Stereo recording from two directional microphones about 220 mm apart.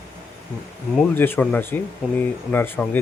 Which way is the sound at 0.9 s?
5° left (ahead or behind).